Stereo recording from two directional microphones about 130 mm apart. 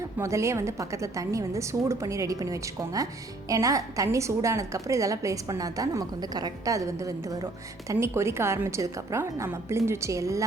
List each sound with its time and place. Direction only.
0.2 s a woman's voice: 20° right (ahead or behind)